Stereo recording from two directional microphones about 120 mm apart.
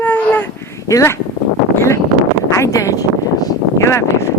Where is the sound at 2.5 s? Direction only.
25° left (ahead or behind).